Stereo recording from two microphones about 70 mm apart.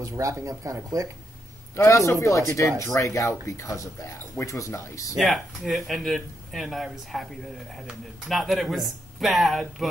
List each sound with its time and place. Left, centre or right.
0.0 s speech: right
1.8 s speech: left
5.2 s speech: centre
8.3 s speech: centre